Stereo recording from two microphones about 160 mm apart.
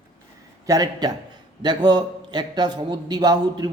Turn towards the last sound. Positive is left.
turn(degrees=-25)  # may be behind; listen again after turning